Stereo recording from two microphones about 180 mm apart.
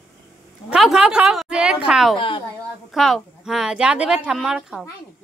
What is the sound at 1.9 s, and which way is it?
Speech, 5° right (ahead or behind).